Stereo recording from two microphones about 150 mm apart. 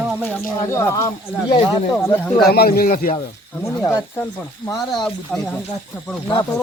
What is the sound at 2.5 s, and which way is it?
Speech, 90° left.